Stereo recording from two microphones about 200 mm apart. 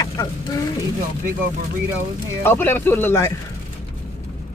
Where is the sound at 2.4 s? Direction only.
10° left (ahead or behind).